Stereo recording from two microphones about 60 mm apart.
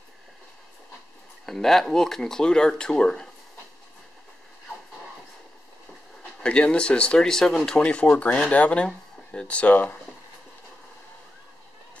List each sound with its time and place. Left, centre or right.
1.4 s speech: centre
6.4 s speech: centre